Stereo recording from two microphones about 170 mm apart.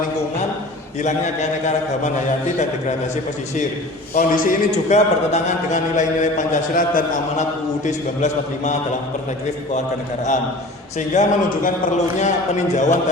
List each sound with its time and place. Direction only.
1.0 s a man's voice: 45° left (ahead or behind)
4.1 s a man's voice: 55° left (ahead or behind)
11.1 s a man's voice: 50° left (ahead or behind)
12.7 s a man's voice: 45° left (ahead or behind)